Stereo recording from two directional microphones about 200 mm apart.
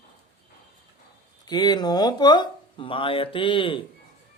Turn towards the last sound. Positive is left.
turn(degrees=25)  # may be behind; listen again after turning